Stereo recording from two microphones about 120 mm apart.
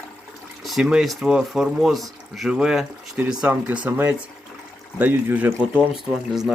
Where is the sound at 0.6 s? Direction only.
5° right (ahead or behind).